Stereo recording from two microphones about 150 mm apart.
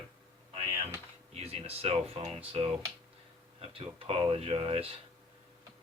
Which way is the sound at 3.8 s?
40° right (ahead or behind).